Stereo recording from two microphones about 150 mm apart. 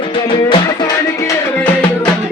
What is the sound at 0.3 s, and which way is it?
Music, 35° left (ahead or behind).